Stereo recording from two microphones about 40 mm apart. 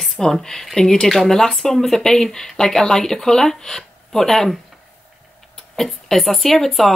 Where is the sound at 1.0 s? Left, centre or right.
Centre.